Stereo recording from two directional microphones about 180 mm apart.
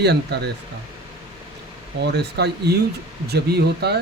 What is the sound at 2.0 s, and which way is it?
Speech, 70° right (ahead or behind).